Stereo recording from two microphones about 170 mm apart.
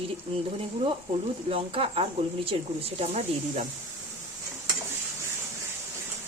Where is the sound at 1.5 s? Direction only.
35° right (ahead or behind).